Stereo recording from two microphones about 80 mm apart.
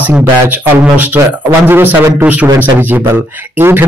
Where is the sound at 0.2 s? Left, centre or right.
Right.